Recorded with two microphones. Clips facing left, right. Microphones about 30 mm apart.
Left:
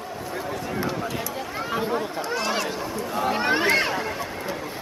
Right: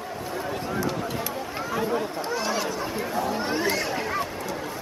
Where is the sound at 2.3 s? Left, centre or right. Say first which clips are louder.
Left 1 dB; left.